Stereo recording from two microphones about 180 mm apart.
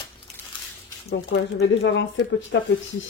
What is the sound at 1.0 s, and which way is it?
Speech, 75° left (ahead or behind).